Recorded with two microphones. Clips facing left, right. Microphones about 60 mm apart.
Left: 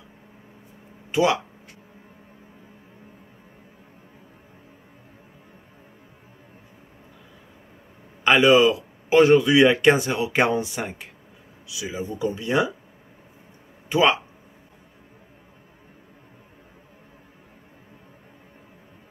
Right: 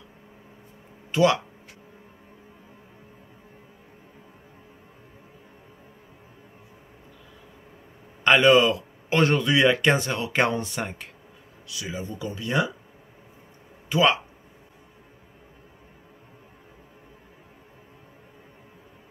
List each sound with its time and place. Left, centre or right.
1.1 s speech: centre
8.2 s a man's voice: centre; by 12.7 s left
13.8 s speech: left